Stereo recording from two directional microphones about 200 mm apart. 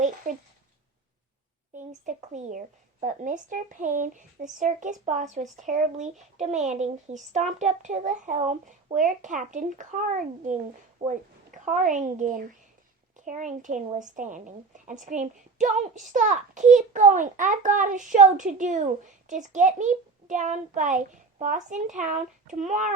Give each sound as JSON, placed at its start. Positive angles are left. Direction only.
{"t": 0.3, "sound": "a woman's voice", "side_deg": -40}
{"t": 2.0, "sound": "a woman's voice", "side_deg": -40}